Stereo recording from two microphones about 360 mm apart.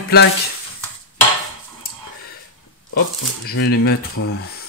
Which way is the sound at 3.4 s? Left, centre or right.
Left.